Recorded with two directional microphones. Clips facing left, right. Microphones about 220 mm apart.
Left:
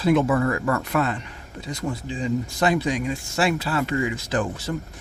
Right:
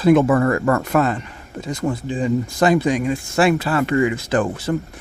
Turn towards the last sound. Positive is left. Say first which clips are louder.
# right 6 dB
turn(degrees=-55)  # may be behind; listen again after turning